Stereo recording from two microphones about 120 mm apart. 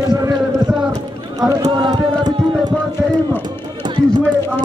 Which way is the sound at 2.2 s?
35° right (ahead or behind).